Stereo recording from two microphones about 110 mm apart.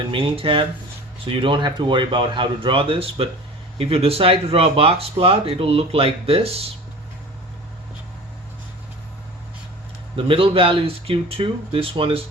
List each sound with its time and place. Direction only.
0.1 s speech: 50° right (ahead or behind)
10.2 s speech: 55° right (ahead or behind)